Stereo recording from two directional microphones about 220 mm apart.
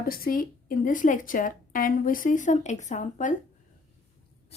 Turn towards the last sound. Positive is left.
turn(degrees=35)  # may be behind; listen again after turning